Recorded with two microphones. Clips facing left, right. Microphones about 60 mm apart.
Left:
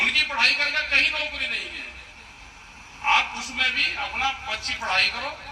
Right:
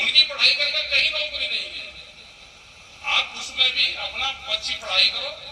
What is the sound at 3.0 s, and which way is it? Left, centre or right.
A man's voice, left.